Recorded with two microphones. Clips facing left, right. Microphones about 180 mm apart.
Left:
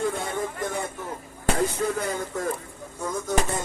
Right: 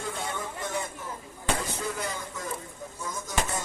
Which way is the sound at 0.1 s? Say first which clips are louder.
Left 5 dB; 50° left (ahead or behind).